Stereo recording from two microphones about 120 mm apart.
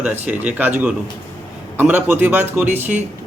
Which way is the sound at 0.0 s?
15° right (ahead or behind).